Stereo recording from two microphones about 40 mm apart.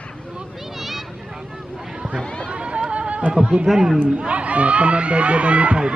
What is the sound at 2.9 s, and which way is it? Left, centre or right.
Music, right.